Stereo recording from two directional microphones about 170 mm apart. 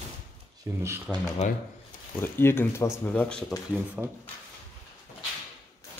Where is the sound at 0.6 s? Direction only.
20° right (ahead or behind).